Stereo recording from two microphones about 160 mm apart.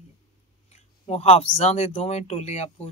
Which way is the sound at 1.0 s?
40° left (ahead or behind).